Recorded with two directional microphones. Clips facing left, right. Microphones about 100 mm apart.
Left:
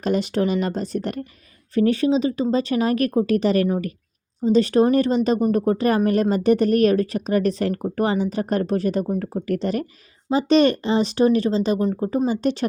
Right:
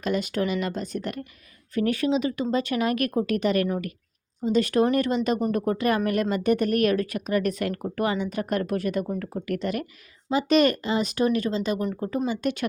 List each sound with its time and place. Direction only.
0.0 s speech: 35° left (ahead or behind)